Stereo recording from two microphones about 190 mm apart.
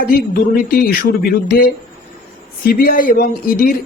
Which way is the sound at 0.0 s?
50° left (ahead or behind).